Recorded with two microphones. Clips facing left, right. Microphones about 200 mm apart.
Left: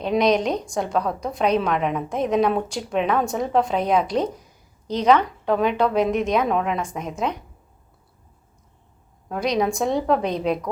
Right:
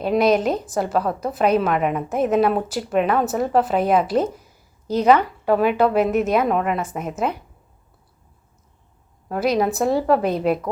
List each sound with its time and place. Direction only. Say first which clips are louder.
0.0 s a woman's voice: right 2 dB; 5° right (ahead or behind)
9.3 s a woman's voice: right 2 dB; 5° right (ahead or behind)